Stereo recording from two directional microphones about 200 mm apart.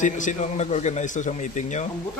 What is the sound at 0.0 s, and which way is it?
Speech, 40° left (ahead or behind).